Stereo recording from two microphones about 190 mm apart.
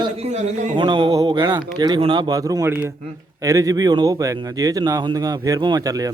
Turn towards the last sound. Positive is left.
turn(degrees=-20)  # may be behind; listen again after turning